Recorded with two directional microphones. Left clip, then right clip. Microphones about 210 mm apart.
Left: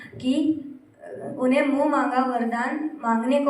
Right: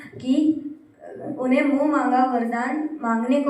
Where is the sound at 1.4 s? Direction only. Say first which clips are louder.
Even; 55° left (ahead or behind).